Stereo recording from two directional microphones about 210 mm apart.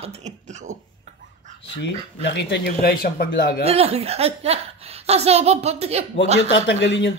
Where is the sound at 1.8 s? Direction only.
55° left (ahead or behind).